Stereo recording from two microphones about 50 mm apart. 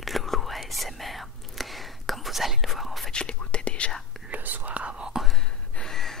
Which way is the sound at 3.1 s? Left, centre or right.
Centre.